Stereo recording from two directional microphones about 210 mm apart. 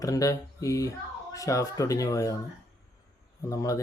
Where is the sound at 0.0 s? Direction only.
15° left (ahead or behind).